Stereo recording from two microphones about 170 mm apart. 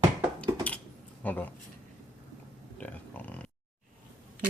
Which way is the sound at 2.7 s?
10° left (ahead or behind).